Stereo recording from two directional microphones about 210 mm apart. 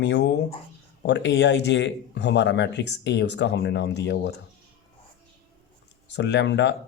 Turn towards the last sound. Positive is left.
turn(degrees=60)  # may be behind; listen again after turning